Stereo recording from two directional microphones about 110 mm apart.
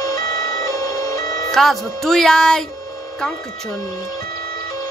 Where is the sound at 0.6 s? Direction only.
30° left (ahead or behind).